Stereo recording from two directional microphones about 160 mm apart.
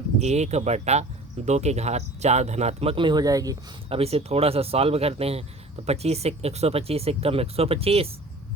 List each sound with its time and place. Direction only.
0.2 s speech: 45° right (ahead or behind); by 3.6 s 20° right (ahead or behind)
3.8 s speech: 40° right (ahead or behind)